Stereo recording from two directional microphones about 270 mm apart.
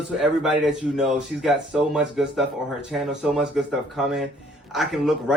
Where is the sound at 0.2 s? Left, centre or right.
Centre.